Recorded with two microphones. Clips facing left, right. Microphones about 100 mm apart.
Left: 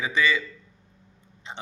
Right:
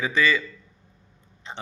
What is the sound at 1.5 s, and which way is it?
Speech, 15° left (ahead or behind).